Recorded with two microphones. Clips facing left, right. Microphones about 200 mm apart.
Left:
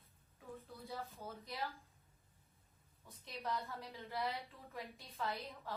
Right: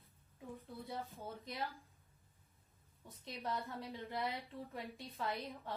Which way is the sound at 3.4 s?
30° right (ahead or behind).